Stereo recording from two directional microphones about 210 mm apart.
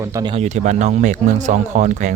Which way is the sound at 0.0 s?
15° right (ahead or behind).